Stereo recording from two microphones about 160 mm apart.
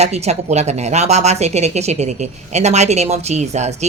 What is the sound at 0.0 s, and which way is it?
Speech, 40° right (ahead or behind).